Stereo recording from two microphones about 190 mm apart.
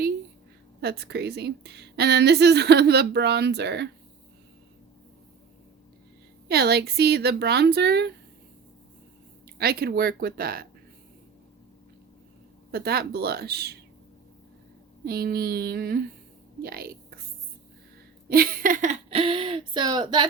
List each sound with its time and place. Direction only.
0.8 s a woman's voice: 60° right (ahead or behind)
6.5 s a woman's voice: 55° right (ahead or behind)
9.6 s speech: 55° right (ahead or behind)
12.7 s a woman's voice: 55° right (ahead or behind)
15.0 s a woman's voice: 55° right (ahead or behind)
18.3 s speech: 50° right (ahead or behind); by 20.2 s 25° right (ahead or behind)